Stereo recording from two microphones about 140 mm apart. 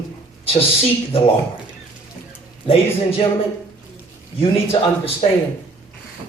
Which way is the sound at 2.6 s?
40° left (ahead or behind).